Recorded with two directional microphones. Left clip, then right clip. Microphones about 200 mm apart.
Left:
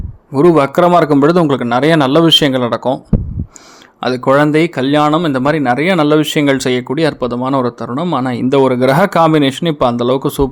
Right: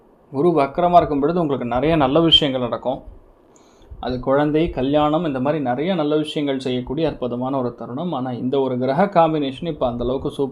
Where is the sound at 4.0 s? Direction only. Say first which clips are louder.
Left 8 dB; 35° left (ahead or behind).